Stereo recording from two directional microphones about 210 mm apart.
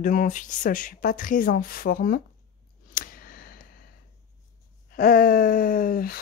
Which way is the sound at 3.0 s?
40° left (ahead or behind).